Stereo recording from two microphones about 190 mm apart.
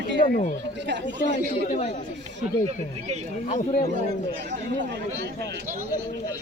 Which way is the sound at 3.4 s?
40° left (ahead or behind).